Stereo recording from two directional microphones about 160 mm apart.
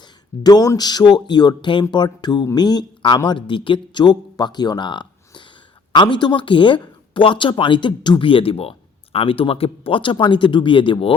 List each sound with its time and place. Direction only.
0.4 s speech: 20° left (ahead or behind)